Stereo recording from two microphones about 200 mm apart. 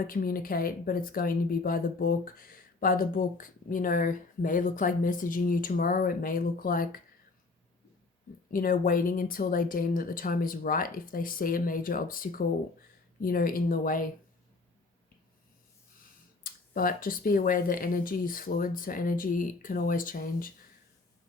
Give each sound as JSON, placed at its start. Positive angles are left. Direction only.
{"t": 0.1, "sound": "speech", "side_deg": 45}
{"t": 8.5, "sound": "speech", "side_deg": 45}
{"t": 16.4, "sound": "speech", "side_deg": 45}